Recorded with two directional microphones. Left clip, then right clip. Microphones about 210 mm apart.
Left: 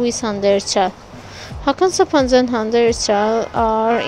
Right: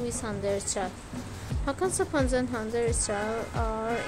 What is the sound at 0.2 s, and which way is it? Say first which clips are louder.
A woman's voice: left 14 dB; 30° left (ahead or behind).